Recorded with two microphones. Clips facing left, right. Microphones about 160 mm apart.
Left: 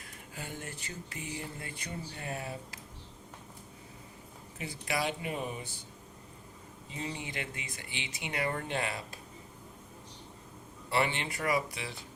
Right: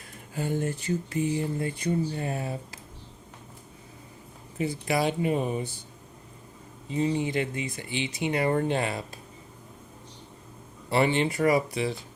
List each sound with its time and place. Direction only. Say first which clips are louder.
0.3 s speech: right 14 dB; 35° right (ahead or behind)
4.5 s speech: right 8 dB; 30° right (ahead or behind)
6.9 s speech: right 13 dB; 30° right (ahead or behind)
10.9 s speech: right 8 dB; 30° right (ahead or behind)